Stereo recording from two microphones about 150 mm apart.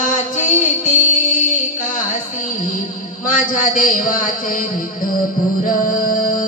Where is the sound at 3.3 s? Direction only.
60° left (ahead or behind).